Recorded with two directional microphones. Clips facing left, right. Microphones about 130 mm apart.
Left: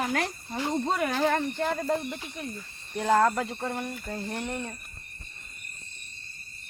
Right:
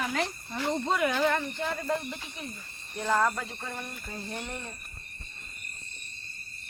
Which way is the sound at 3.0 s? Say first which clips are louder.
Left 4 dB; 55° left (ahead or behind).